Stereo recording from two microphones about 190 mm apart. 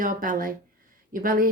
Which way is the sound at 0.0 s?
45° right (ahead or behind).